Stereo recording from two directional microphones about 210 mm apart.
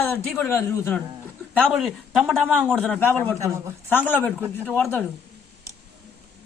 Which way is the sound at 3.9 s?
10° left (ahead or behind).